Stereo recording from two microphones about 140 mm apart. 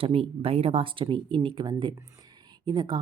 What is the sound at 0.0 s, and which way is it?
Speech, 40° right (ahead or behind).